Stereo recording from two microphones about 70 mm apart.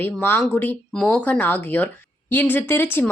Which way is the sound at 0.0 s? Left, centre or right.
Left.